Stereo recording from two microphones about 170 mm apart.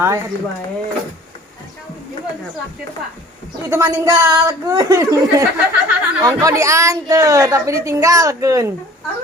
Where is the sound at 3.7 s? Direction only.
15° right (ahead or behind).